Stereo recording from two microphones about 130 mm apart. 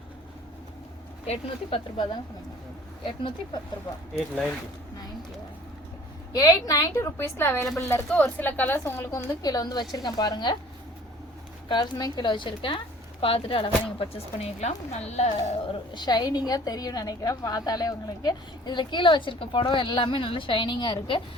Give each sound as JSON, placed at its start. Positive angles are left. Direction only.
{"t": 1.2, "sound": "speech", "side_deg": 55}
{"t": 3.1, "sound": "a woman's voice", "side_deg": 40}
{"t": 6.3, "sound": "a woman's voice", "side_deg": 30}
{"t": 11.7, "sound": "a woman's voice", "side_deg": 35}
{"t": 16.0, "sound": "a woman's voice", "side_deg": 30}